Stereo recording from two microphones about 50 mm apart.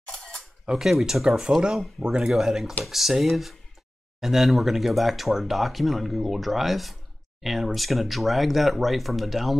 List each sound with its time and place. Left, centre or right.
0.1 s a sound: centre
0.7 s speech: centre
2.3 s speech: centre